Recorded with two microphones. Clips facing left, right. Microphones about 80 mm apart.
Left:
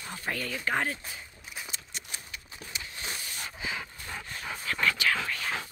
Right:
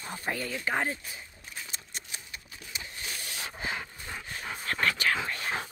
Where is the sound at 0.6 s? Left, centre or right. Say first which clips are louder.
Left 1 dB; centre.